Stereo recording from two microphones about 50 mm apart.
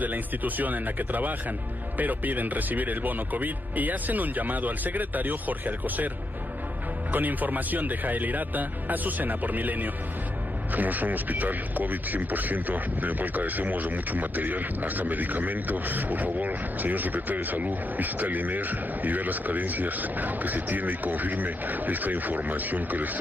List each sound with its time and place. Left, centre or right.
0.0 s speech: right
7.1 s speech: right